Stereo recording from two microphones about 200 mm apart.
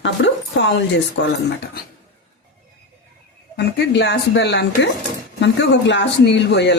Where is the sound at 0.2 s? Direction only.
65° left (ahead or behind).